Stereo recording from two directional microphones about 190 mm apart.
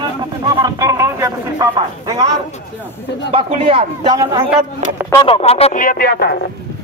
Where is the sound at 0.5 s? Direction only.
20° right (ahead or behind).